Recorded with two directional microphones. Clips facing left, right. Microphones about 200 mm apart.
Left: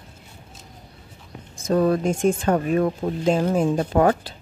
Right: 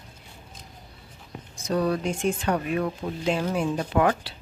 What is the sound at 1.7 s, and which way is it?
Speech, 45° left (ahead or behind).